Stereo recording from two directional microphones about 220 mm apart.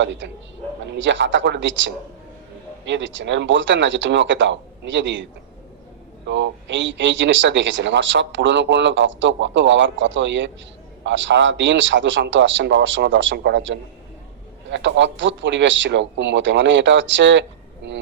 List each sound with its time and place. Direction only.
0.0 s speech: 55° right (ahead or behind)